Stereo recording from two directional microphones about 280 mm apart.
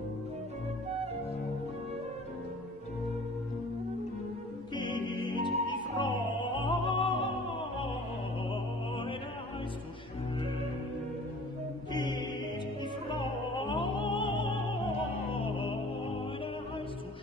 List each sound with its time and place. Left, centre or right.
4.7 s music: centre
11.9 s music: centre
13.7 s opera: centre
15.3 s music: centre